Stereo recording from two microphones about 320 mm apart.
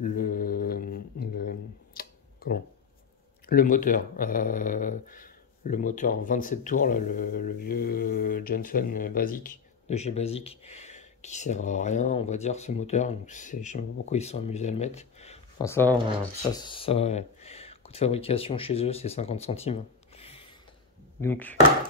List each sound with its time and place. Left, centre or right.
0.0 s mantra: left
3.4 s speech: left; by 16.0 s centre
16.0 s speech: centre
16.5 s speech: centre
21.2 s speech: centre